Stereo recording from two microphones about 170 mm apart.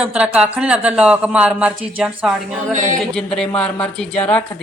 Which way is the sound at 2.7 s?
45° right (ahead or behind).